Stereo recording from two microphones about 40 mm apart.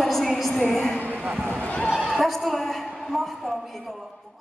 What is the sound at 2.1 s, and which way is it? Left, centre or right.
Speech, centre.